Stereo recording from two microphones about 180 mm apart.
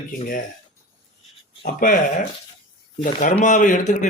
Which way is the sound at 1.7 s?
50° left (ahead or behind).